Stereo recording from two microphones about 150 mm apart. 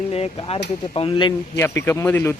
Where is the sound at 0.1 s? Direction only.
40° left (ahead or behind).